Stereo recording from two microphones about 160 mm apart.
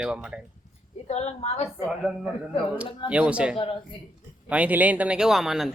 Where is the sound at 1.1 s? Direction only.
45° left (ahead or behind).